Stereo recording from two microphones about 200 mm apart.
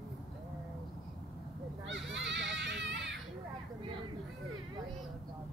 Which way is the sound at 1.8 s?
65° right (ahead or behind).